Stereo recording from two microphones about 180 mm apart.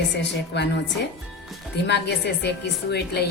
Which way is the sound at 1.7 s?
70° left (ahead or behind).